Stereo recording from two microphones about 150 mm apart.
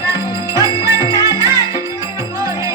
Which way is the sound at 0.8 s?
20° right (ahead or behind).